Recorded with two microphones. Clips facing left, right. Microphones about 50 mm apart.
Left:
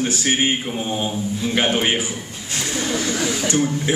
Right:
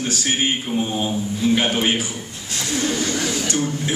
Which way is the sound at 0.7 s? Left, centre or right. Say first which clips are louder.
Right 2 dB; centre.